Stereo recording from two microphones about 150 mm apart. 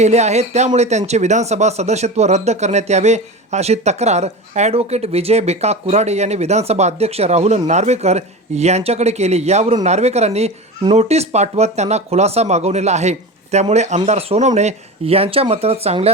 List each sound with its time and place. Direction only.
0.0 s speech: 50° right (ahead or behind)